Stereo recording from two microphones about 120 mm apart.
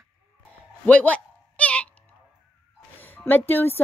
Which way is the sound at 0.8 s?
10° left (ahead or behind).